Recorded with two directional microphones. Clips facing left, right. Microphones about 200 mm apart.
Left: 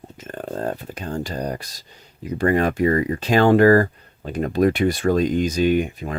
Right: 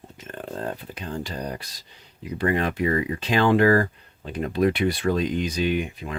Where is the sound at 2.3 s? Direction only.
45° left (ahead or behind).